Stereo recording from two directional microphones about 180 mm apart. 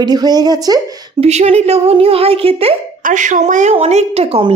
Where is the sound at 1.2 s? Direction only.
35° right (ahead or behind).